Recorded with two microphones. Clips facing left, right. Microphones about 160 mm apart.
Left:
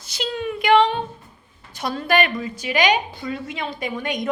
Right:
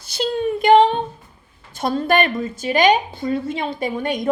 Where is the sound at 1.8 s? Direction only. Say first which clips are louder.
Right 3 dB; 45° right (ahead or behind).